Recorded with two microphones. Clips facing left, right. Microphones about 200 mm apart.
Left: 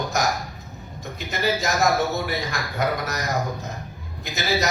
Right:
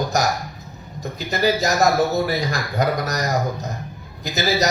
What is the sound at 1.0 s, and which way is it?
Speech, 35° right (ahead or behind).